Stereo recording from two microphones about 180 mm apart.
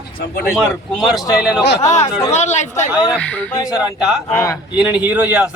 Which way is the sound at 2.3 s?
40° left (ahead or behind).